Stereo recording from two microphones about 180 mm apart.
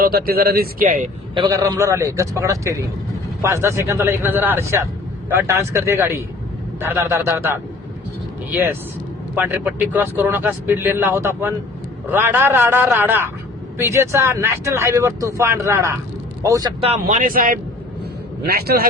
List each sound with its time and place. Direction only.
0.0 s speech: 60° right (ahead or behind)
1.4 s speech: 20° right (ahead or behind)
16.8 s speech: 35° right (ahead or behind)
17.2 s a man's voice: 50° right (ahead or behind)